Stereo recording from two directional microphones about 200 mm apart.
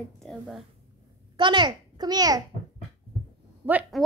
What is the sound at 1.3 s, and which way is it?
A child's voice, 25° right (ahead or behind).